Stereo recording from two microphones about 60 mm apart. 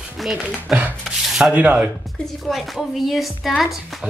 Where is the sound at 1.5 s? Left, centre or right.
Right.